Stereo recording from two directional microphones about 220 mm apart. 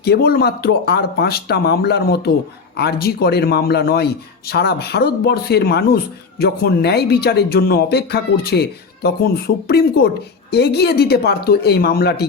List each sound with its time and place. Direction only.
0.0 s speech: 45° left (ahead or behind)